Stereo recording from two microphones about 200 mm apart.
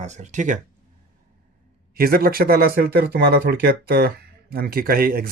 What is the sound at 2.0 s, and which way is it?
Speech, 45° right (ahead or behind).